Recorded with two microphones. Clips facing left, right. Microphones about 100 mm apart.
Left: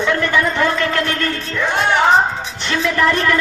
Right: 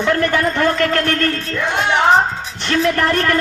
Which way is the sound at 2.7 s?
50° right (ahead or behind).